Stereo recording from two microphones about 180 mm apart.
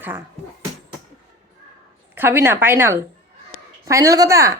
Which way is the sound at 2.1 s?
10° right (ahead or behind).